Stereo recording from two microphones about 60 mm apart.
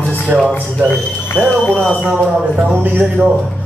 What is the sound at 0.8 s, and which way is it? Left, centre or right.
Speech, left.